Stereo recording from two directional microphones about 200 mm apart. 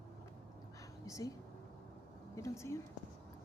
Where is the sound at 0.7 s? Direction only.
15° left (ahead or behind).